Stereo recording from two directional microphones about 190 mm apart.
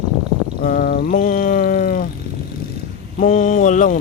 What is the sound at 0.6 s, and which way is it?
Speech, 50° left (ahead or behind).